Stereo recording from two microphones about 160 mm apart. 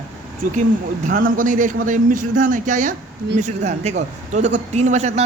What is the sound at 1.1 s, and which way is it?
A man's voice, 60° right (ahead or behind).